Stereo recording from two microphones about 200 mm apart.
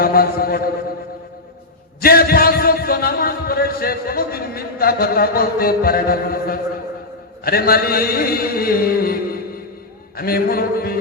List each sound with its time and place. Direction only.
0.0 s a man's voice: 50° left (ahead or behind)
2.0 s a man's voice: 50° left (ahead or behind)